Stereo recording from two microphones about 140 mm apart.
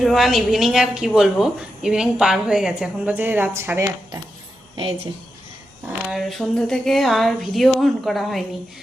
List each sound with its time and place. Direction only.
0.0 s a woman's voice: centre (ahead or behind)
4.8 s a woman's voice: 40° right (ahead or behind)
6.1 s a woman's voice: centre (ahead or behind)